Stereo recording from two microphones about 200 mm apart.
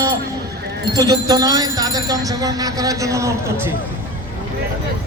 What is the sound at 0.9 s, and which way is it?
Jingle bell, 20° right (ahead or behind).